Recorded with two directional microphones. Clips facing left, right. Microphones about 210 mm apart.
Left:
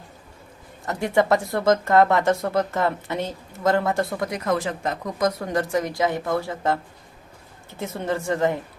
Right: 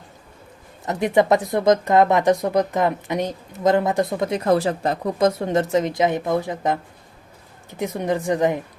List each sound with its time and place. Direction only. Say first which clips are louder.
0.9 s speech: right 3 dB; 20° right (ahead or behind)